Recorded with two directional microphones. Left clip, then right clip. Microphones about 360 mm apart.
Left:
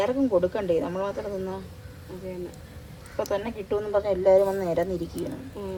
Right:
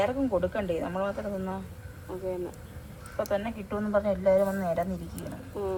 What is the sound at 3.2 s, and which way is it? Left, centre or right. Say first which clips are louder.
Speech: left 2 dB; centre.